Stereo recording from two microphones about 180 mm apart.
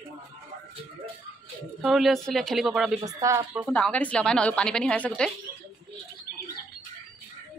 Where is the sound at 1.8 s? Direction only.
Centre (ahead or behind).